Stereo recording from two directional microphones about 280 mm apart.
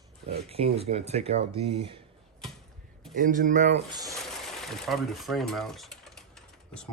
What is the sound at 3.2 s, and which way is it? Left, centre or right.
Speech, right.